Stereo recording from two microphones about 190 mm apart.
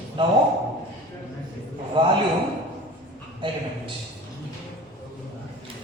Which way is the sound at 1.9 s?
25° right (ahead or behind).